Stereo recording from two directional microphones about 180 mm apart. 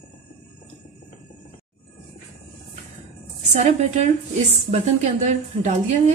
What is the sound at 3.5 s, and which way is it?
A woman's voice, 40° right (ahead or behind).